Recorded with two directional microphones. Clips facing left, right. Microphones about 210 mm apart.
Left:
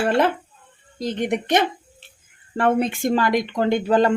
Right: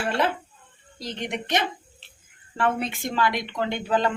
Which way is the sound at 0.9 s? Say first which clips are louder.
Left 8 dB; 50° left (ahead or behind).